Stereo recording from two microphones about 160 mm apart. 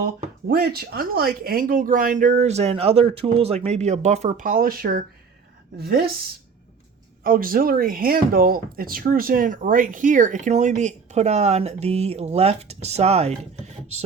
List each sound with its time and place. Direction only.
0.5 s a woman's voice: 75° right (ahead or behind)
7.3 s speech: 65° right (ahead or behind); by 13.4 s 45° right (ahead or behind)